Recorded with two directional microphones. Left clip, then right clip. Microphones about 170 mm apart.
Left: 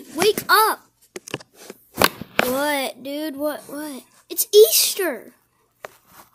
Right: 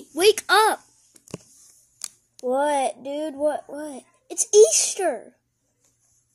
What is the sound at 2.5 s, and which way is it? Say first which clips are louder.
Speech: right 1 dB; 30° left (ahead or behind).